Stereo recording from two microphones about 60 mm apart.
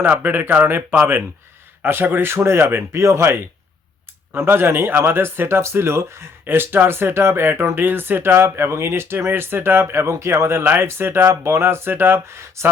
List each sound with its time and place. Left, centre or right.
0.0 s speech: right
4.3 s speech: right